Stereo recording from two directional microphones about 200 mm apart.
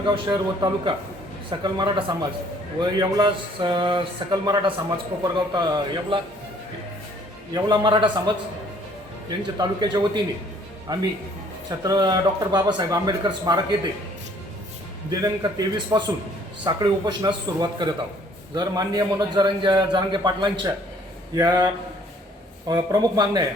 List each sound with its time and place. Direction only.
0.0 s a man's voice: 20° right (ahead or behind)
7.5 s a man's voice: 20° right (ahead or behind)
9.6 s a man's voice: 20° right (ahead or behind)
15.1 s a man's voice: 20° right (ahead or behind)
22.7 s a man's voice: 20° right (ahead or behind)